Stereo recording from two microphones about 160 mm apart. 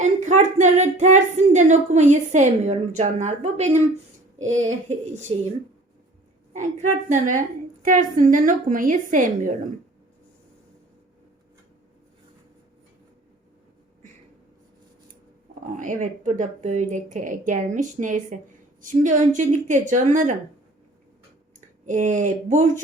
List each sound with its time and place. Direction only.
0.0 s speech: 45° right (ahead or behind)
6.5 s a woman's voice: 50° right (ahead or behind)
15.8 s speech: 55° right (ahead or behind)
21.5 s speech: 50° right (ahead or behind)